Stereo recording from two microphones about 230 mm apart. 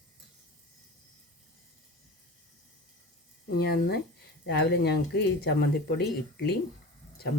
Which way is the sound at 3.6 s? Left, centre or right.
Left.